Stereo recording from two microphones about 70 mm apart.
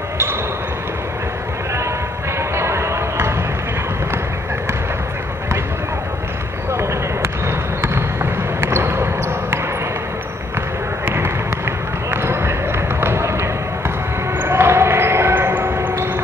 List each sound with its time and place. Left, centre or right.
2.5 s a sound: right
6.7 s basketball bounce: right
11.1 s basketball bounce: right